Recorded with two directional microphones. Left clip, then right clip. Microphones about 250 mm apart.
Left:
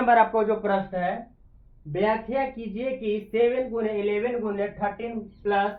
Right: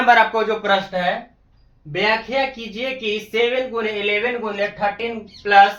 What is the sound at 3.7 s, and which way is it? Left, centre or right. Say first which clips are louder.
Speech: right 5 dB; centre.